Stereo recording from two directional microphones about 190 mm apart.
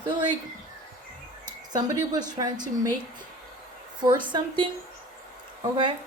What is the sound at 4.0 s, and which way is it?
Speech, 25° right (ahead or behind).